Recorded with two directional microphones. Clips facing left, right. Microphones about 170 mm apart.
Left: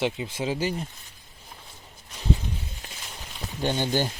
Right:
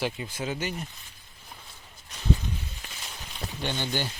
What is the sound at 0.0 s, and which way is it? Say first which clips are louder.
Speech: left 4 dB; 25° left (ahead or behind).